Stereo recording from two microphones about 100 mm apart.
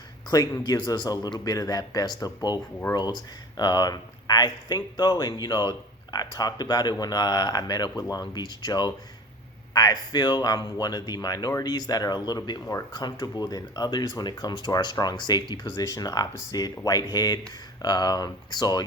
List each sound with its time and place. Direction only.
0.3 s speech: 40° left (ahead or behind)
15.9 s speech: 40° left (ahead or behind)